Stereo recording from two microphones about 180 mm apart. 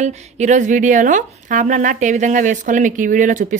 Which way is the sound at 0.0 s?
40° right (ahead or behind).